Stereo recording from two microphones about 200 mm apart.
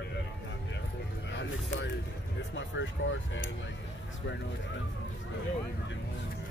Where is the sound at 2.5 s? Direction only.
70° left (ahead or behind).